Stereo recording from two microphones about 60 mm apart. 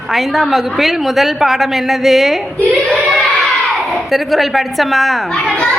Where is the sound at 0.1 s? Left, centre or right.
Centre.